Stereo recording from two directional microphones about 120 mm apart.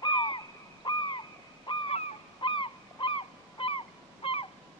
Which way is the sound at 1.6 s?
45° left (ahead or behind).